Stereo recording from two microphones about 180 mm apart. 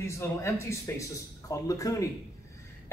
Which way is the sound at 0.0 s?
15° left (ahead or behind).